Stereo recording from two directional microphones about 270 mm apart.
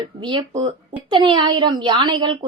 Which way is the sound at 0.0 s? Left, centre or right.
Centre.